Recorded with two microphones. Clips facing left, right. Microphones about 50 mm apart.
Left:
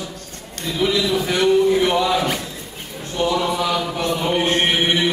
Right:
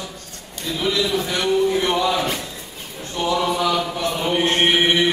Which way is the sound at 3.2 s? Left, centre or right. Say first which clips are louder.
Left 1 dB; centre.